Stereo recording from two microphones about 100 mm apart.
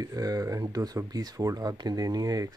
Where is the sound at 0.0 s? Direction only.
40° right (ahead or behind).